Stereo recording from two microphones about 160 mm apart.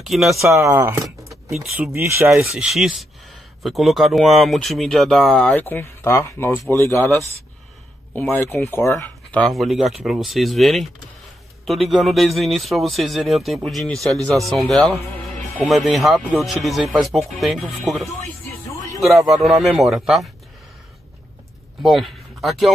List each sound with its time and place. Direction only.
0.0 s speech: centre (ahead or behind)
0.4 s speech: 15° right (ahead or behind)
1.0 s keys jangling: centre (ahead or behind)
2.0 s speech: 15° right (ahead or behind)
2.5 s speech: 5° right (ahead or behind); by 7.1 s 15° left (ahead or behind)
8.5 s speech: 15° left (ahead or behind); by 20.2 s centre (ahead or behind)
21.8 s speech: centre (ahead or behind)